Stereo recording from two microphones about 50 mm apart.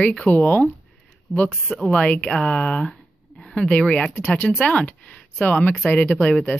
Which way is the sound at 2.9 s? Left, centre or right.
Centre.